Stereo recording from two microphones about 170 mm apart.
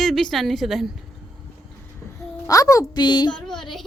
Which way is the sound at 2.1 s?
20° left (ahead or behind).